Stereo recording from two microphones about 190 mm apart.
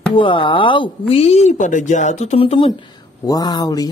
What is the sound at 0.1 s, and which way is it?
Speech, 25° left (ahead or behind).